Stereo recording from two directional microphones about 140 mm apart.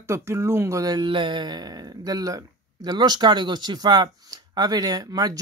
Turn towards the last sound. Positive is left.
turn(degrees=-30)  # may be behind; listen again after turning